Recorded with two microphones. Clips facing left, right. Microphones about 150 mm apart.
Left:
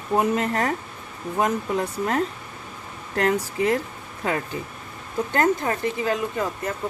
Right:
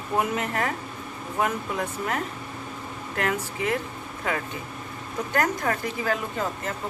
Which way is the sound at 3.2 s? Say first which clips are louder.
Left 6 dB; 35° left (ahead or behind).